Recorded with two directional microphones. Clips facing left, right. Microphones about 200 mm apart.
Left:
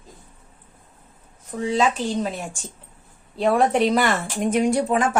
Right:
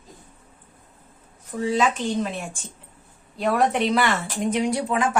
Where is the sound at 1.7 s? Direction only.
30° left (ahead or behind).